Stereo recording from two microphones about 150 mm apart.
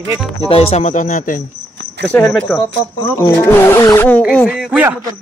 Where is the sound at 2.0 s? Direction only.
5° left (ahead or behind).